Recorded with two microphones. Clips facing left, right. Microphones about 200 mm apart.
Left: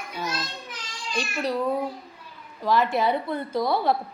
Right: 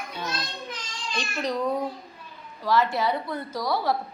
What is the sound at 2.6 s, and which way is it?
Speech, 20° left (ahead or behind).